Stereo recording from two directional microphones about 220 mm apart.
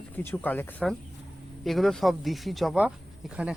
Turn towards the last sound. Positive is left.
turn(degrees=-5)  # may be behind; listen again after turning